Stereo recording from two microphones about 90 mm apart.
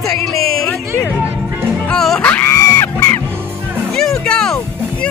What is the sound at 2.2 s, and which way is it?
Music, 20° left (ahead or behind).